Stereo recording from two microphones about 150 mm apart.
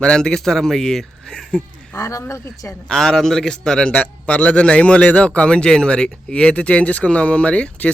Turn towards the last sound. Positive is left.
turn(degrees=10)  # may be behind; listen again after turning